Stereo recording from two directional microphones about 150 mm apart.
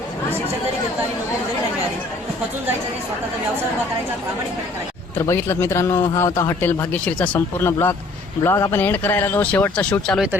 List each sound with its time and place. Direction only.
5.1 s a man's voice: 15° left (ahead or behind)